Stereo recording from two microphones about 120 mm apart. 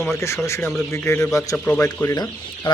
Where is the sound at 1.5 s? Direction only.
10° left (ahead or behind).